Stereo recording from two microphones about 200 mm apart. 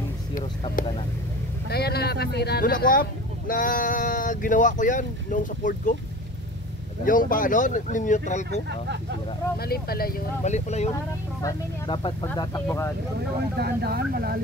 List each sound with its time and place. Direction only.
1.7 s speech: 50° left (ahead or behind)
7.1 s speech: 40° left (ahead or behind)
9.6 s speech: 50° left (ahead or behind)
10.4 s speech: 35° left (ahead or behind)
11.4 s speech: 20° left (ahead or behind)
13.6 s speech: 50° right (ahead or behind)